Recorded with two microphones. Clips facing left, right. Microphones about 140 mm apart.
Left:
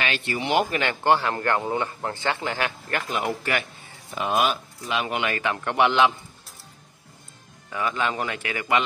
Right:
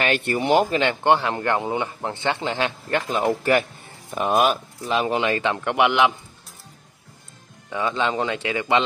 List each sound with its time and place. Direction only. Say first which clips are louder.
0.0 s speech: right 5 dB; 50° right (ahead or behind)
0.7 s a man's voice: right 3 dB; 20° right (ahead or behind)
7.7 s speech: right 3 dB; 25° right (ahead or behind)